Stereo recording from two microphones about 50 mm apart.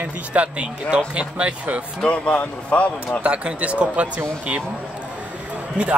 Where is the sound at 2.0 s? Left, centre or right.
Left.